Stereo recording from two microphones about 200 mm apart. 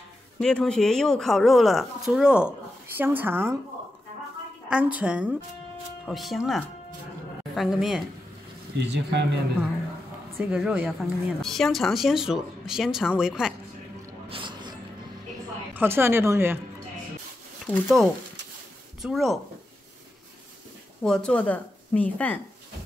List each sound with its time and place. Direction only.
0.4 s a woman's voice: 5° left (ahead or behind)
4.6 s a woman's voice: 5° right (ahead or behind)
8.7 s speech: 60° right (ahead or behind)
10.3 s a woman's voice: 5° right (ahead or behind)
14.3 s music: 25° right (ahead or behind)
15.7 s speech: 10° right (ahead or behind)
17.6 s a woman's voice: 5° left (ahead or behind)
21.0 s speech: 5° left (ahead or behind)